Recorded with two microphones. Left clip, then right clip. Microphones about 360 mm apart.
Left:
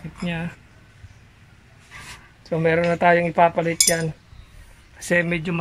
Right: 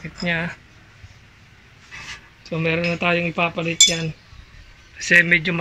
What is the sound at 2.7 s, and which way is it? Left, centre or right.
Speech, left.